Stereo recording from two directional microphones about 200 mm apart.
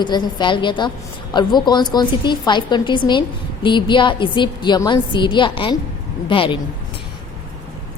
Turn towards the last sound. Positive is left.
turn(degrees=25)  # may be behind; listen again after turning